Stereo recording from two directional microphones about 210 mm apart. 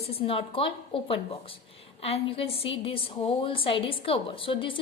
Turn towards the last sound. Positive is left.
turn(degrees=25)  # may be behind; listen again after turning